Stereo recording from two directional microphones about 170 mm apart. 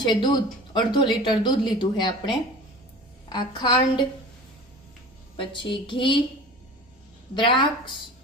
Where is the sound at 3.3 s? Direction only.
25° left (ahead or behind).